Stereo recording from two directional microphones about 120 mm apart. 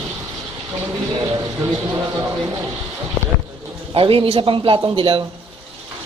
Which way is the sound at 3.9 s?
50° right (ahead or behind).